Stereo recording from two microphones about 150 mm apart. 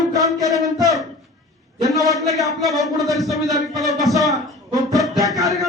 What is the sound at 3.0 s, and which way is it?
Speech, centre (ahead or behind).